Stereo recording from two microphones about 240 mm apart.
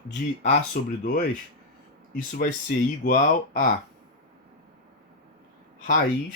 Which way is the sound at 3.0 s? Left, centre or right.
Left.